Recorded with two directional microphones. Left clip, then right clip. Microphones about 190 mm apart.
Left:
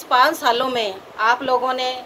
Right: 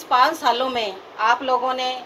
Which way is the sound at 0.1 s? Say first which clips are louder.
Left 1 dB; 20° left (ahead or behind).